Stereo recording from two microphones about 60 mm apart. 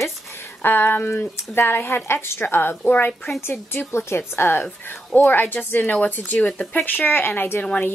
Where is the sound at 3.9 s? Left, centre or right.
Left.